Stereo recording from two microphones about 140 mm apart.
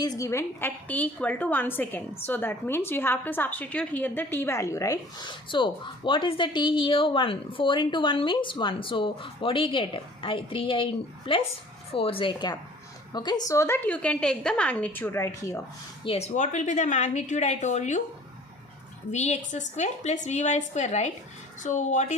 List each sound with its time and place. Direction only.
0.0 s a woman's voice: 20° left (ahead or behind)
13.8 s a woman's voice: 10° left (ahead or behind)
16.0 s a woman's voice: 50° left (ahead or behind)
19.1 s a woman's voice: 55° left (ahead or behind)